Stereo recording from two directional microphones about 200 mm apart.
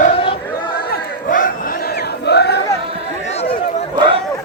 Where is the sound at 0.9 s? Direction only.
45° left (ahead or behind).